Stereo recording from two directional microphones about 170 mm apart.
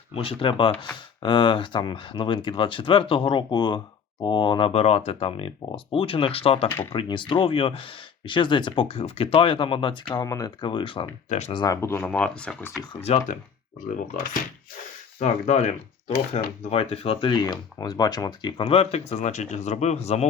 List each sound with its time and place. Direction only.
0.1 s speech: 35° left (ahead or behind)
11.3 s speech: 40° left (ahead or behind)
11.5 s speech: 20° left (ahead or behind)
12.9 s speech: 40° left (ahead or behind)
15.2 s speech: 40° left (ahead or behind)